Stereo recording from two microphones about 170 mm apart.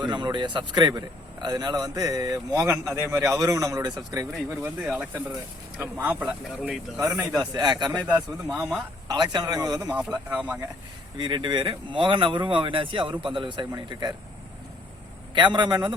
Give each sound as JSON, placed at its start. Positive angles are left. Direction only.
{"t": 0.0, "sound": "speech", "side_deg": -25}
{"t": 6.9, "sound": "speech", "side_deg": -20}
{"t": 8.0, "sound": "speech", "side_deg": -5}
{"t": 9.0, "sound": "speech", "side_deg": -25}
{"t": 10.2, "sound": "speech", "side_deg": -10}
{"t": 11.2, "sound": "speech", "side_deg": -25}
{"t": 15.4, "sound": "speech", "side_deg": -25}